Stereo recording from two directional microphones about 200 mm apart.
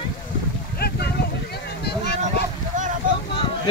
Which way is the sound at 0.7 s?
50° left (ahead or behind).